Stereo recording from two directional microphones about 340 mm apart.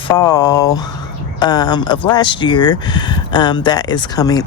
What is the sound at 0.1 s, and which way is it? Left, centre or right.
Speech, centre.